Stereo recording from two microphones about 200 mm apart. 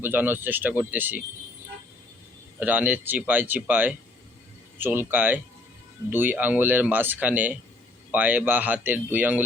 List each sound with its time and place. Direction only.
0.0 s speech: 10° right (ahead or behind)
2.6 s speech: 10° right (ahead or behind)